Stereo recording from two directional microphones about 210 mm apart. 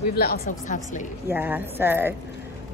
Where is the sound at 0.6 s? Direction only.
35° left (ahead or behind).